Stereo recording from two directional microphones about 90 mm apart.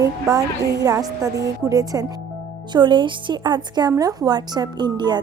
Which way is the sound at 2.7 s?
60° right (ahead or behind).